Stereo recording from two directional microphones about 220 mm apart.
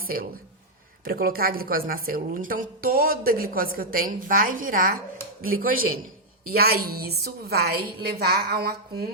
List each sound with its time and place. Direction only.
0.0 s a woman's voice: 40° right (ahead or behind)